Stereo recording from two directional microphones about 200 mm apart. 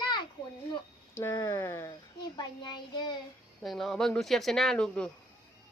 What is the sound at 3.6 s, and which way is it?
A woman's voice, centre (ahead or behind).